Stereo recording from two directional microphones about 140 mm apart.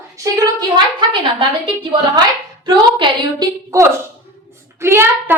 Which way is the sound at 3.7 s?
20° right (ahead or behind).